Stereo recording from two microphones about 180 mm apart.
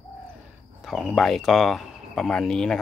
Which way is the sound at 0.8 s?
Centre (ahead or behind).